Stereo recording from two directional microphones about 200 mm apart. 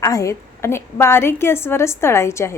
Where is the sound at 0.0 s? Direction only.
15° left (ahead or behind).